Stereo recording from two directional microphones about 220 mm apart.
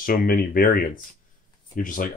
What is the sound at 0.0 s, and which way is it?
Speech, 40° left (ahead or behind).